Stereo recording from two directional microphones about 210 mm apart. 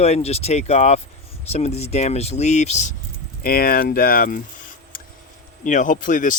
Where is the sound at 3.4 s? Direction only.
45° left (ahead or behind).